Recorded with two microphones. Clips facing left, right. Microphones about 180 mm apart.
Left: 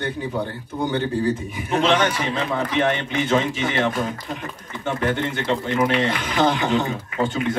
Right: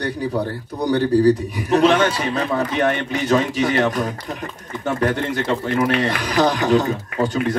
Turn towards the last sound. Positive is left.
turn(degrees=-40)  # may be behind; listen again after turning